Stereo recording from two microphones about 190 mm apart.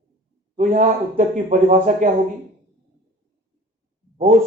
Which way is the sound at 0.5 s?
40° right (ahead or behind).